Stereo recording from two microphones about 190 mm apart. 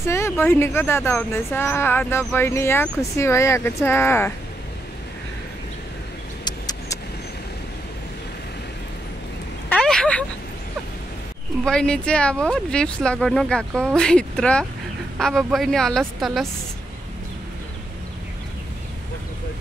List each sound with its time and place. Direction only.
0.0 s speech: 15° left (ahead or behind)
6.4 s vehicle: 20° left (ahead or behind)
9.7 s a sound: 5° left (ahead or behind)
11.6 s speech: 5° left (ahead or behind)